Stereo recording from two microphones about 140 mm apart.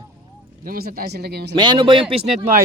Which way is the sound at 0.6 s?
90° right.